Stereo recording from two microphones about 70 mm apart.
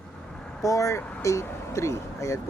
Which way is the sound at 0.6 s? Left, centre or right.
Left.